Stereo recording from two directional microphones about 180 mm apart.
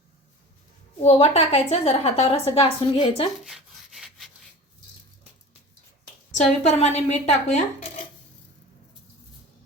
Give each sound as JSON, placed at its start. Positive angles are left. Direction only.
{"t": 1.0, "sound": "a woman's voice", "side_deg": 35}
{"t": 3.4, "sound": "rub", "side_deg": 0}
{"t": 6.3, "sound": "a woman's voice", "side_deg": 35}